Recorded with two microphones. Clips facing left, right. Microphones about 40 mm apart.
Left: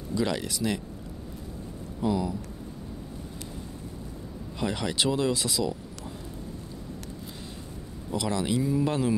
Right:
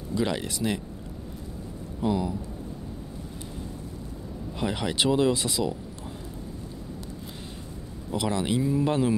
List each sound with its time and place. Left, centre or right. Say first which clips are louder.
0.1 s speech: right 1 dB; centre
2.0 s speech: right 1 dB; centre
4.6 s speech: right 1 dB; centre
8.1 s speech: right 1 dB; centre